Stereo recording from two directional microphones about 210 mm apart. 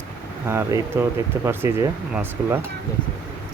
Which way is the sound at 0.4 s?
10° right (ahead or behind).